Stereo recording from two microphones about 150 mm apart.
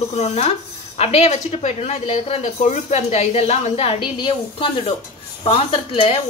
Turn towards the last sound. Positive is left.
turn(degrees=35)  # may be behind; listen again after turning